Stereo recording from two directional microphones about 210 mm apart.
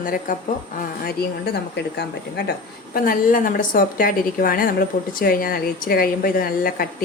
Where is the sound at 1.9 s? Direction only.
50° left (ahead or behind).